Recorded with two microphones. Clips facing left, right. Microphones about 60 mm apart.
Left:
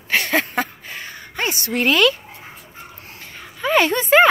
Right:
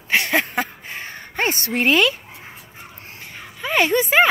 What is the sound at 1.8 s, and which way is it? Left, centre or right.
Speech, right.